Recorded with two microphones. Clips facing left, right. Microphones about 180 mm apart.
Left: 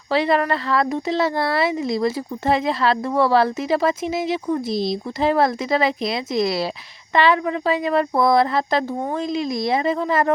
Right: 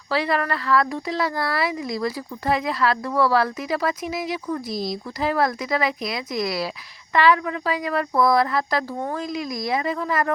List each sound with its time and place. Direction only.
0.1 s speech: 25° left (ahead or behind)